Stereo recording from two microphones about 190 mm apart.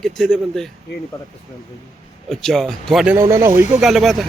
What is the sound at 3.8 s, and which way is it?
Speech, centre (ahead or behind).